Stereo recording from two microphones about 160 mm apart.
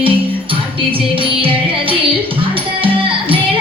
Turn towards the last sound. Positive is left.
turn(degrees=-35)  # may be behind; listen again after turning